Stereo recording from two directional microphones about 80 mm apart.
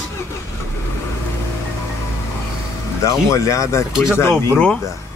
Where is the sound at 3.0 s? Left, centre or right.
Left.